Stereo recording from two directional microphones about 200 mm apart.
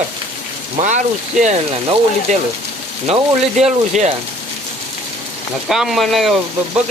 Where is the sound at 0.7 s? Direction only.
35° right (ahead or behind).